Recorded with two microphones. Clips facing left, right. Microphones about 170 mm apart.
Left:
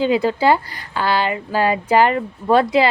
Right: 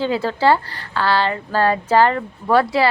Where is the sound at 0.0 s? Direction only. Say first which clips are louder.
Left 2 dB; 15° left (ahead or behind).